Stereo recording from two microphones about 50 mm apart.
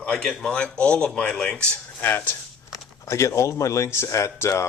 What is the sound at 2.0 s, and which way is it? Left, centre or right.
Speech, left.